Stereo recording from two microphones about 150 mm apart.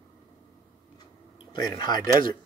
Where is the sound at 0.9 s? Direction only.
35° left (ahead or behind).